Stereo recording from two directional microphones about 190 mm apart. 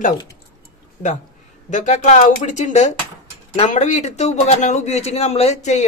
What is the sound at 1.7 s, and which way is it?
Speech, 40° left (ahead or behind).